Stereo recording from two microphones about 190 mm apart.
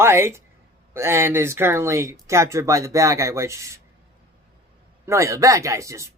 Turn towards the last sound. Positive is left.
turn(degrees=-15)  # may be behind; listen again after turning